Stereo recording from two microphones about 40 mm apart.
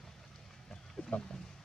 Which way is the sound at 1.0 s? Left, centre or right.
Left.